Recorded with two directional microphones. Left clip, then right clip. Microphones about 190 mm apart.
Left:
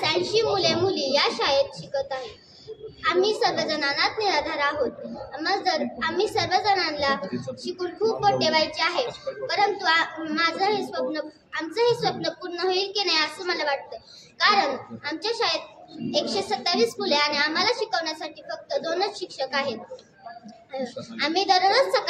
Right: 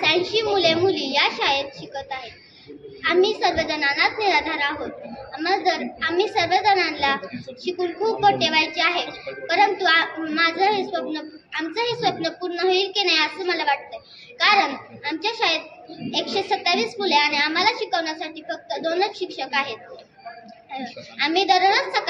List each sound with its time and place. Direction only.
0.0 s a child's voice: 20° left (ahead or behind)